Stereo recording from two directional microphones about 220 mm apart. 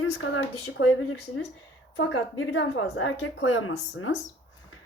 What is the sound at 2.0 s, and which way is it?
Speech, 65° left (ahead or behind).